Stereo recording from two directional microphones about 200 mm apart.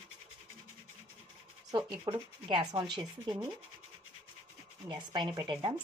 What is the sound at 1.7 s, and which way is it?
Speech, 20° right (ahead or behind).